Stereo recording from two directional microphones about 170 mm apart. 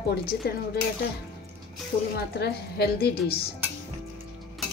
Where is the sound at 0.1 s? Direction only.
65° left (ahead or behind).